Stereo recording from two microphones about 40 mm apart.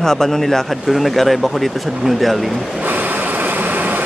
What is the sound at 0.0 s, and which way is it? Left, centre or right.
Speech, centre.